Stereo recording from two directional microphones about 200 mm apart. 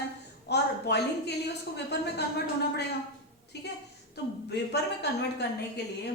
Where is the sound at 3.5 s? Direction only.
55° left (ahead or behind).